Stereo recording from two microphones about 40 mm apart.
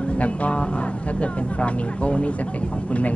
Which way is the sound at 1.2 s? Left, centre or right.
Left.